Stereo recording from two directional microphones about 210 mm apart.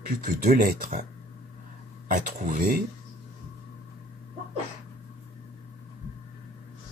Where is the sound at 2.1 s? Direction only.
40° right (ahead or behind).